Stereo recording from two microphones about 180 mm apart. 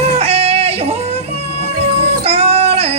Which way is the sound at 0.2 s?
35° right (ahead or behind).